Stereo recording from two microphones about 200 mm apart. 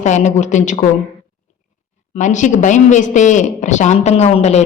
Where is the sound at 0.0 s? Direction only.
35° left (ahead or behind).